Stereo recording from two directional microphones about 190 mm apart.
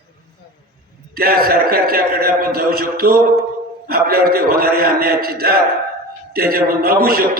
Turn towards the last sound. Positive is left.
turn(degrees=-50)  # may be behind; listen again after turning